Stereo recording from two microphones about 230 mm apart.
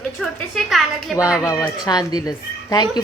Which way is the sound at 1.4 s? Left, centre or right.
Centre.